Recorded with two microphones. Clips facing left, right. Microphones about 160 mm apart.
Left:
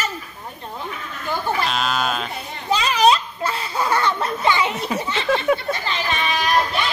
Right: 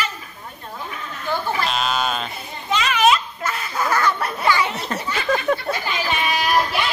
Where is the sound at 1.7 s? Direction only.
Centre (ahead or behind).